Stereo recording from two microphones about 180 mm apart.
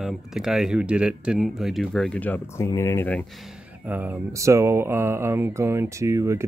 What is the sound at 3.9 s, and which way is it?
Speech, 10° right (ahead or behind).